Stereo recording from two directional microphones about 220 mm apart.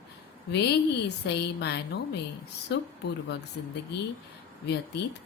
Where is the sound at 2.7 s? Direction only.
50° left (ahead or behind).